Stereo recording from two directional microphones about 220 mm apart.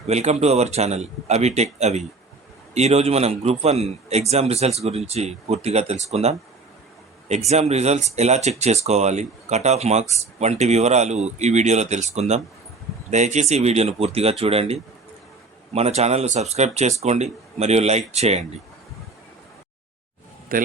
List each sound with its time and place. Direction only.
0.1 s a man's voice: 30° right (ahead or behind)
20.5 s a man's voice: 40° right (ahead or behind)